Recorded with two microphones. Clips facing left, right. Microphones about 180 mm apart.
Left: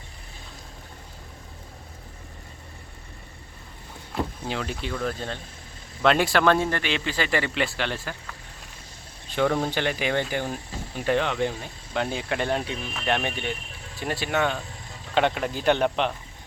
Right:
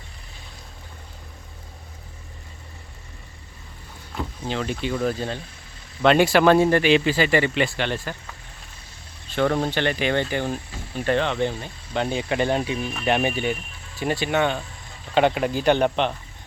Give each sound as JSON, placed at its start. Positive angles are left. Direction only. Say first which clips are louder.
{"t": 4.1, "sound": "speech", "louder": "even", "side_deg": 0}
{"t": 9.3, "sound": "speech", "louder": "right 2 dB", "side_deg": 15}